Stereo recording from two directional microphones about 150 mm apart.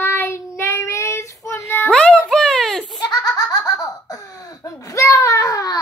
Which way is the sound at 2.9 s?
30° left (ahead or behind).